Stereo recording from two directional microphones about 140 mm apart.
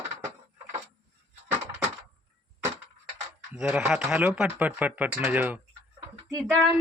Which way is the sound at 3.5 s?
5° right (ahead or behind).